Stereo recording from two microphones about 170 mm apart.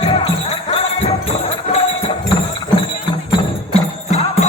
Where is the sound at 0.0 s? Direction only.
35° left (ahead or behind).